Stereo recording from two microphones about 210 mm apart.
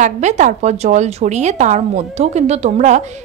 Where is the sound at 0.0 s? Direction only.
35° right (ahead or behind).